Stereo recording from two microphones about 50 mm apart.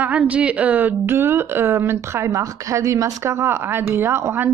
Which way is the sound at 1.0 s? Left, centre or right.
Right.